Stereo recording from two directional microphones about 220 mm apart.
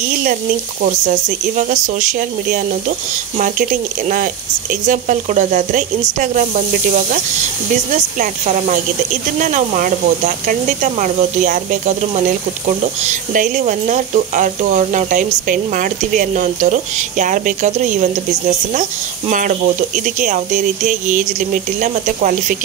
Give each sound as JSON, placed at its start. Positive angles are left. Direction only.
{"t": 1.7, "sound": "speech", "side_deg": -35}
{"t": 4.8, "sound": "speech", "side_deg": -35}
{"t": 7.9, "sound": "speech", "side_deg": -35}
{"t": 13.0, "sound": "speech", "side_deg": -35}